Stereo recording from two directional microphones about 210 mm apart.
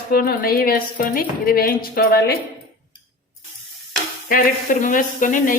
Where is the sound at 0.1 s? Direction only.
45° left (ahead or behind).